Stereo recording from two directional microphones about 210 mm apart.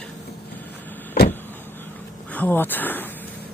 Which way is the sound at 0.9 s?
10° left (ahead or behind).